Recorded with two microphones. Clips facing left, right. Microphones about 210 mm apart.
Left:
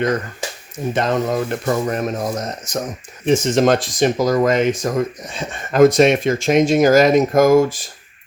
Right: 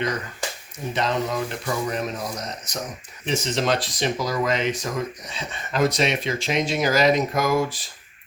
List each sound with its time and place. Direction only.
0.9 s speech: 50° left (ahead or behind)